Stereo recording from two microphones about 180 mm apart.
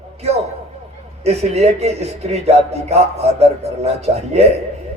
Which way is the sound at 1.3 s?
35° right (ahead or behind).